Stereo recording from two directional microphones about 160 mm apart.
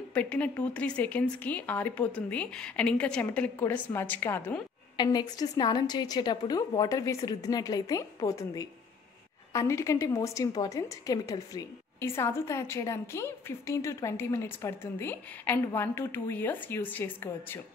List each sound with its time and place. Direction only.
0.1 s a woman's voice: 10° left (ahead or behind)
4.9 s a woman's voice: 25° left (ahead or behind)